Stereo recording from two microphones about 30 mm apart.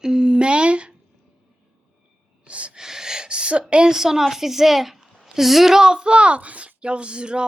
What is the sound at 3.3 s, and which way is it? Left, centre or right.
Speech, right.